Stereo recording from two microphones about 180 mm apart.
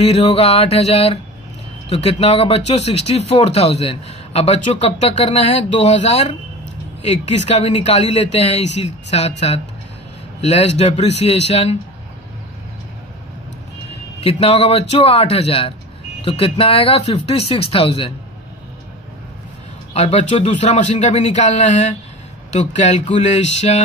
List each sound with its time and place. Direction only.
0.0 s speech: 35° left (ahead or behind)
10.4 s speech: 35° left (ahead or behind)
14.2 s speech: 35° left (ahead or behind)
19.9 s speech: 40° left (ahead or behind)